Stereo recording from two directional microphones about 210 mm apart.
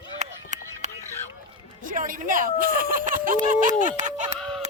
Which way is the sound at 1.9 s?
40° right (ahead or behind).